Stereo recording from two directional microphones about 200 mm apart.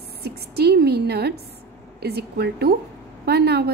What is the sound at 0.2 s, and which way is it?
A woman's voice, 55° right (ahead or behind).